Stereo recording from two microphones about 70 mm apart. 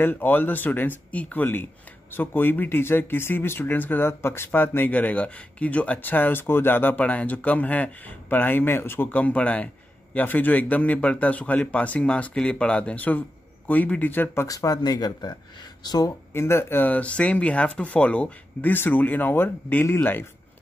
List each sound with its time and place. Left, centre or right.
0.0 s speech: left
14.5 s speech: left
16.3 s speech: left